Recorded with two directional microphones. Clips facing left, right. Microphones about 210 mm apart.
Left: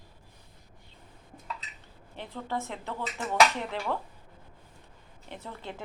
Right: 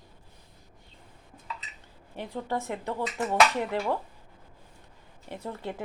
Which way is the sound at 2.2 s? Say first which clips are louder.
Right 3 dB; 15° right (ahead or behind).